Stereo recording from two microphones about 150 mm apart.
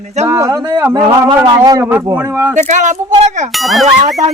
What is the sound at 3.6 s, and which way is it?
Speech, centre (ahead or behind).